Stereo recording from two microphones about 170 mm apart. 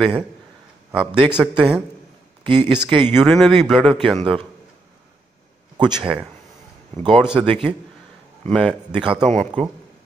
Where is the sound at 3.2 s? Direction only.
Centre (ahead or behind).